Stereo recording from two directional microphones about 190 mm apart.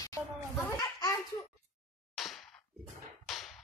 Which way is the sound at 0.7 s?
20° left (ahead or behind).